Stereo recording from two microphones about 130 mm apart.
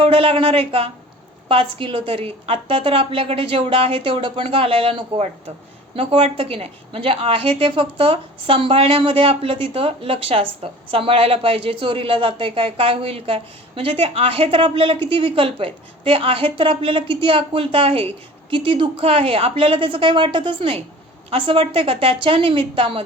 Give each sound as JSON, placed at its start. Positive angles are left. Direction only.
{"t": 0.0, "sound": "speech", "side_deg": -45}